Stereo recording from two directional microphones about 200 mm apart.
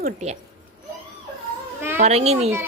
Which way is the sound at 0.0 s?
35° right (ahead or behind).